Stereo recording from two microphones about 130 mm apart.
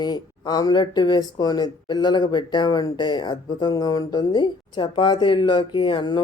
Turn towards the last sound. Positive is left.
turn(degrees=35)  # may be behind; listen again after turning